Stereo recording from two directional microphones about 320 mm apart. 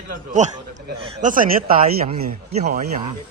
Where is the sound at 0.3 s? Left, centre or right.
Right.